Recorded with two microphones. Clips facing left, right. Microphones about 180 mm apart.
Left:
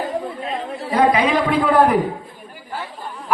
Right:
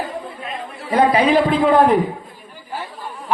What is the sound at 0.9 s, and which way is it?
Speech, 30° right (ahead or behind).